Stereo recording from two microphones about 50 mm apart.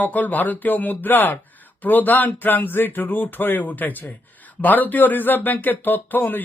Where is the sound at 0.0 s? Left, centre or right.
Left.